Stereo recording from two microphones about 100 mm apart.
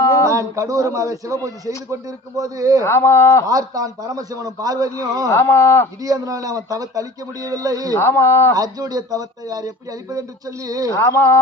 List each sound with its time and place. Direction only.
0.0 s a sound: 30° left (ahead or behind)
0.3 s a man's voice: 30° right (ahead or behind)
2.8 s speech: 25° left (ahead or behind)
3.4 s a man's voice: 35° right (ahead or behind)
5.3 s speech: 30° left (ahead or behind)
6.1 s a man's voice: 35° right (ahead or behind)
7.9 s speech: 25° left (ahead or behind)
8.5 s a man's voice: 40° right (ahead or behind)
10.9 s mantra: 30° left (ahead or behind)